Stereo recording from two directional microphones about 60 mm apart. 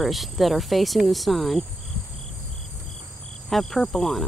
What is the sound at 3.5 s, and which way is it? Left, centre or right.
Insect, centre.